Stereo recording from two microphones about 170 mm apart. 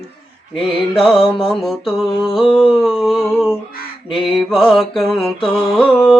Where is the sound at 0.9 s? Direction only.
Centre (ahead or behind).